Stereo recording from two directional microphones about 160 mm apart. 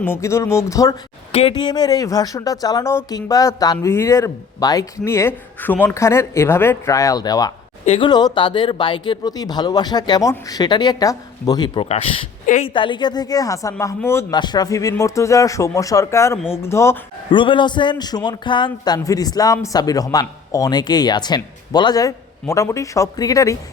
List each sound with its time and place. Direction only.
0.0 s speech: 15° left (ahead or behind)
1.3 s speech: 40° left (ahead or behind)
1.5 s a man's voice: 25° left (ahead or behind)
14.3 s a man's voice: 25° left (ahead or behind)
17.3 s a man's voice: 30° left (ahead or behind)